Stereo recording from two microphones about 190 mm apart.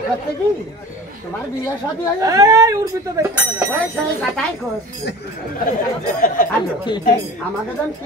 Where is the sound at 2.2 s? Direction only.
15° right (ahead or behind).